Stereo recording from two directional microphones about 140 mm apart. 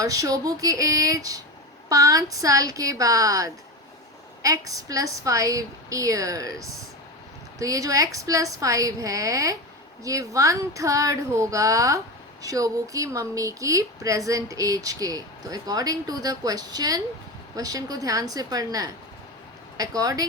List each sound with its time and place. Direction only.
0.0 s a woman's voice: 25° right (ahead or behind)